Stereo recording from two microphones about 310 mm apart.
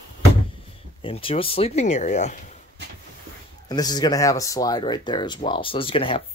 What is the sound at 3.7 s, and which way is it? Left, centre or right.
Speech, centre.